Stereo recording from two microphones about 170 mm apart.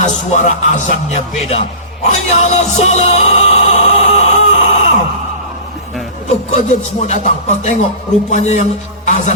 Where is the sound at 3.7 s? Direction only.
40° left (ahead or behind).